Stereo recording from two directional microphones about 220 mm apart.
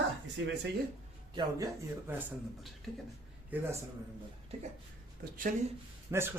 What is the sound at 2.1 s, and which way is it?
Speech, 5° right (ahead or behind).